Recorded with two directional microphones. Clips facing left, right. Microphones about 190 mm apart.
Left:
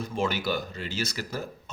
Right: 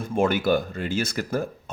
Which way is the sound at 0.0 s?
50° right (ahead or behind).